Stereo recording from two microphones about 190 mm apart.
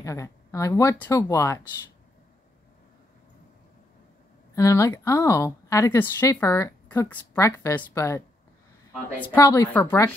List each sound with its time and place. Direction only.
0.0 s speech: 15° left (ahead or behind)
4.6 s speech: 15° left (ahead or behind)
9.2 s speech: 15° left (ahead or behind)